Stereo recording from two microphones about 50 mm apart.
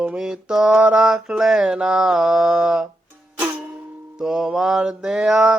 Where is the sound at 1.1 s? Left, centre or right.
Centre.